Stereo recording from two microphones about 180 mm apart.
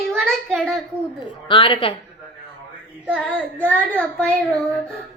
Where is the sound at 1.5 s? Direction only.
30° left (ahead or behind).